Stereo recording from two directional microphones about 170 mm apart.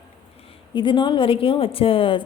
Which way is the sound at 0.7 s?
30° left (ahead or behind).